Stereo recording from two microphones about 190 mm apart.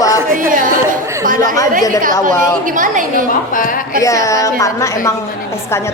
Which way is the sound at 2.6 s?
45° right (ahead or behind).